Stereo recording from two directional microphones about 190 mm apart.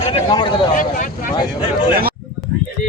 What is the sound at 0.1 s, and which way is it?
Speech, 25° left (ahead or behind).